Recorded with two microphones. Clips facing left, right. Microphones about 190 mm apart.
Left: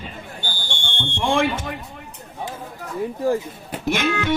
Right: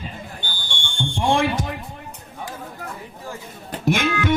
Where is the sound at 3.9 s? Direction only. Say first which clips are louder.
Right 1 dB; 50° right (ahead or behind).